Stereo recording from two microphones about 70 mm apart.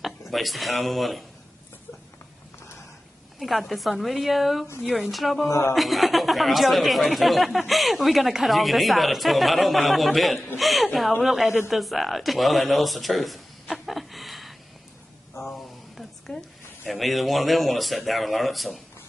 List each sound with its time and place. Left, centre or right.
0.3 s speech: centre
3.3 s speech: centre
5.5 s a woman's voice: left
5.8 s a woman's voice: centre